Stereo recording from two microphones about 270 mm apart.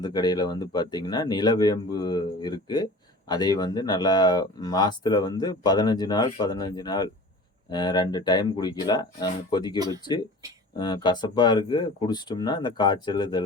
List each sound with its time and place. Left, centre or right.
0.0 s speech: centre
9.7 s speech: centre
10.8 s speech: centre